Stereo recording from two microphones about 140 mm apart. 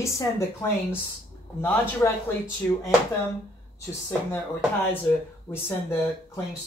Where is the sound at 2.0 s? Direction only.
15° left (ahead or behind).